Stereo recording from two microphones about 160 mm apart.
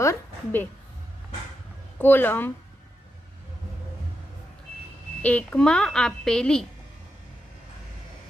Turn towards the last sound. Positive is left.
turn(degrees=5)  # may be behind; listen again after turning